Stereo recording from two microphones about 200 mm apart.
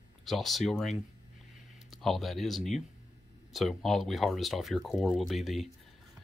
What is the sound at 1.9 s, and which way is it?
Speech, centre (ahead or behind).